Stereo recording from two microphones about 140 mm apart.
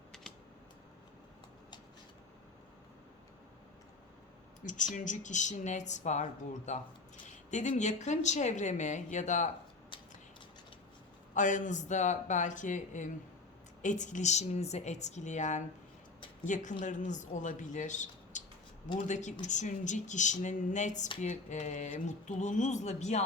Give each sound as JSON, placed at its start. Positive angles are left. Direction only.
{"t": 4.6, "sound": "speech", "side_deg": 65}
{"t": 11.3, "sound": "speech", "side_deg": 65}